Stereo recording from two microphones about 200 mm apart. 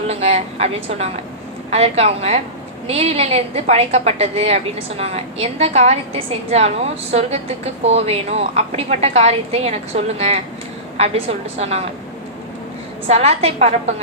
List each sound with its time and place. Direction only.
0.1 s a woman's voice: 30° right (ahead or behind)
13.1 s a woman's voice: 30° right (ahead or behind)